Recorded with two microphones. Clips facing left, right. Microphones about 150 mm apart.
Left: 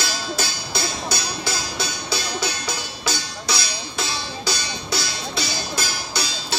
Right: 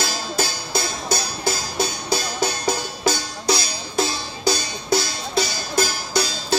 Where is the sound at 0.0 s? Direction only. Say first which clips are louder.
Right 2 dB; 45° right (ahead or behind).